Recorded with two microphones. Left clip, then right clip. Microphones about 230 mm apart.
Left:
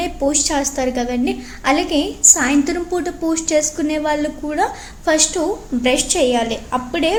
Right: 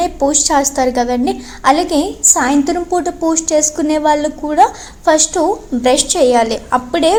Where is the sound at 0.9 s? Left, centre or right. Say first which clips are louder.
Right 6 dB; centre.